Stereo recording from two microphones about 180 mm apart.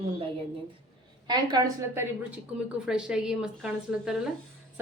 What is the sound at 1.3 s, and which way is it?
Speech, 25° right (ahead or behind).